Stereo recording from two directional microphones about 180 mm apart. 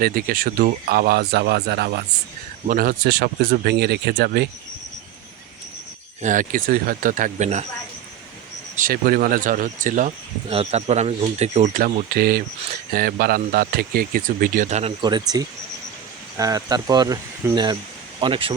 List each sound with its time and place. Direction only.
0.0 s speech: 55° right (ahead or behind)
2.6 s speech: 50° right (ahead or behind)
6.2 s speech: 45° right (ahead or behind)
8.7 s speech: 50° right (ahead or behind)
10.5 s speech: 35° right (ahead or behind)
15.3 s speech: 20° right (ahead or behind)